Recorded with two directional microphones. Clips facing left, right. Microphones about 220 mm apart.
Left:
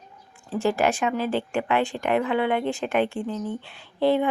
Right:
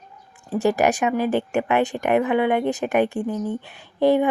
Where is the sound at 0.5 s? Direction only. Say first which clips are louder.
Right 3 dB; 15° right (ahead or behind).